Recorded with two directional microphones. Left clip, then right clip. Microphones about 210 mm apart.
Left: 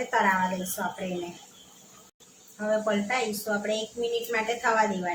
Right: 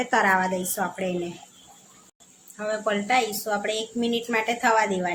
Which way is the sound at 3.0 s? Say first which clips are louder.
Right 5 dB; 40° right (ahead or behind).